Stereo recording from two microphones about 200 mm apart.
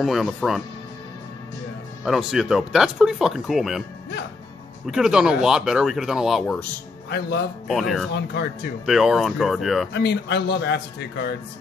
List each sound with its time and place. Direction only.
0.0 s speech: centre (ahead or behind)
2.0 s speech: centre (ahead or behind)
4.8 s speech: 5° right (ahead or behind)
7.1 s a man's voice: 55° left (ahead or behind)
7.6 s speech: centre (ahead or behind)
8.1 s a man's voice: 55° left (ahead or behind)
8.8 s speech: centre (ahead or behind)
9.9 s a man's voice: 60° left (ahead or behind)